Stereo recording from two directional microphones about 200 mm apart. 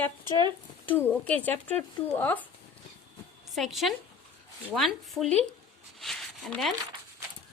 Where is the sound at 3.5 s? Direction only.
Centre (ahead or behind).